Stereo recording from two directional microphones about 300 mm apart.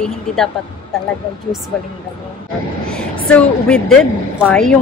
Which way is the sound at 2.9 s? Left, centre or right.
Centre.